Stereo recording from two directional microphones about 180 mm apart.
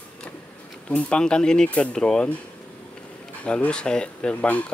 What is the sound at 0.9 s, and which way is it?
Speech, 5° left (ahead or behind).